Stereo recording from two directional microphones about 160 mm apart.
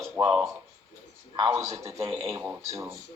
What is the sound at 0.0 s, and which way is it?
Speech, centre (ahead or behind).